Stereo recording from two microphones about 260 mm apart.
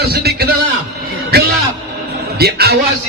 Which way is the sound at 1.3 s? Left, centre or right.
Right.